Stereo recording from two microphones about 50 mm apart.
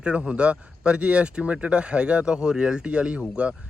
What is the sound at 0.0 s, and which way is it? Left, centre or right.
Speech, right.